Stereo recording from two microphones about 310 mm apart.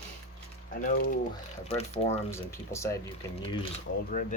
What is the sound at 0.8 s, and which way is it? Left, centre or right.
Speech, left.